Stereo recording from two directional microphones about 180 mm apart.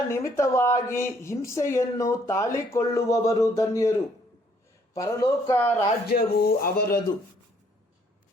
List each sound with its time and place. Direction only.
0.1 s a woman's voice: 15° left (ahead or behind)
4.9 s a woman's voice: 20° left (ahead or behind)
6.1 s speech: 60° left (ahead or behind)